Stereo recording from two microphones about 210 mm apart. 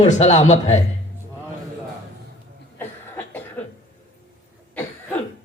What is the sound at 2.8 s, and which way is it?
Cough, 10° left (ahead or behind).